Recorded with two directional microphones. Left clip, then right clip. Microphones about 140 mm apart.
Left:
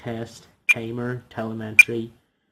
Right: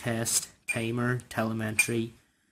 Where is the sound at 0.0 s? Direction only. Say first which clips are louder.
Right 2 dB; 40° right (ahead or behind).